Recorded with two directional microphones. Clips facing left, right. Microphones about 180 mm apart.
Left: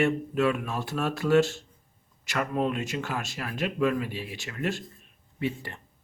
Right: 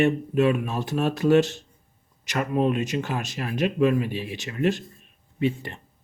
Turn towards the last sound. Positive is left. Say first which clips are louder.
# right 6 dB
turn(degrees=-20)  # may be behind; listen again after turning